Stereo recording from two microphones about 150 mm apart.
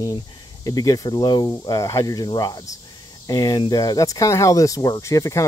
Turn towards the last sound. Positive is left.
turn(degrees=20)  # may be behind; listen again after turning